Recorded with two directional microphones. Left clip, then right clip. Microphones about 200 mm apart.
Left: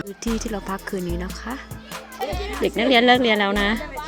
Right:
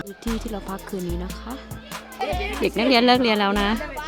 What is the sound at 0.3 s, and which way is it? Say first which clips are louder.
Speech: left 3 dB; centre (ahead or behind).